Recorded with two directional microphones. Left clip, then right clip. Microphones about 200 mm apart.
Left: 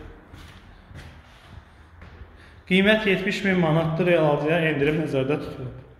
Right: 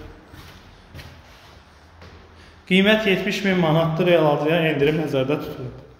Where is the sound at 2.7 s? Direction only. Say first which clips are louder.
Right 2 dB; centre (ahead or behind).